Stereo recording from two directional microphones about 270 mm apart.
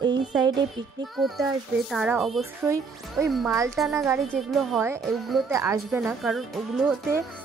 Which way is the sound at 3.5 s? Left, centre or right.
Centre.